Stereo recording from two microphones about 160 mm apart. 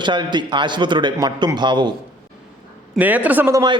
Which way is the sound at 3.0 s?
10° right (ahead or behind).